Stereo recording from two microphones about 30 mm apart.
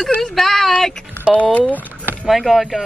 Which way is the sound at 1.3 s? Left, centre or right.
Right.